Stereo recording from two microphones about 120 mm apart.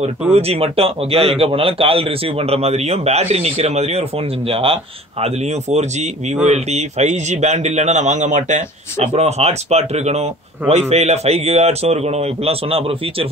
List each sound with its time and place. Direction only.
0.3 s a man's voice: 55° right (ahead or behind)
5.2 s a man's voice: 65° right (ahead or behind)